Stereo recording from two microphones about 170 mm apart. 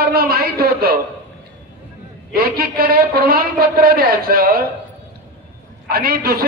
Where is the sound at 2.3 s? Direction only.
65° right (ahead or behind).